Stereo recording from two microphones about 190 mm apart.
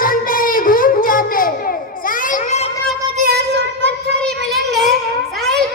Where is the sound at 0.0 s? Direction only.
45° left (ahead or behind).